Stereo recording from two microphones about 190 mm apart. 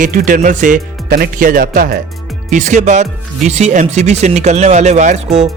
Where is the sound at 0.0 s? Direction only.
45° right (ahead or behind).